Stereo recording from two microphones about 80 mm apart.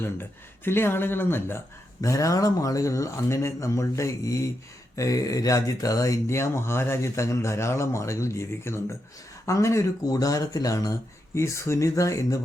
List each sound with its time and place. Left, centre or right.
0.0 s speech: left
2.0 s speech: left
11.3 s speech: left